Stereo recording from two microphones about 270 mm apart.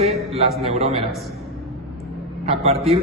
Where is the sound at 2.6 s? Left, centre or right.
Right.